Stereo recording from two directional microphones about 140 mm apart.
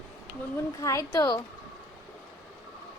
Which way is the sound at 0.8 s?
25° left (ahead or behind).